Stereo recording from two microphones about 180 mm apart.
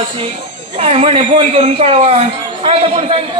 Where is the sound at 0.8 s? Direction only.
30° right (ahead or behind).